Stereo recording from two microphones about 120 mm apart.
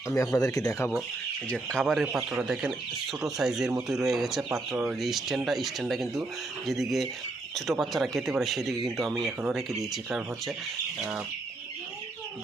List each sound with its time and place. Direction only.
0.1 s speech: 25° left (ahead or behind)
1.5 s speech: 5° left (ahead or behind)